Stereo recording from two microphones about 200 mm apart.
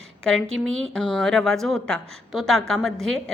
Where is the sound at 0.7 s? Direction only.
80° right.